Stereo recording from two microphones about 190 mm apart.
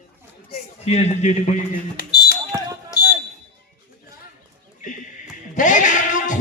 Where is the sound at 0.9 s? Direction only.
35° left (ahead or behind).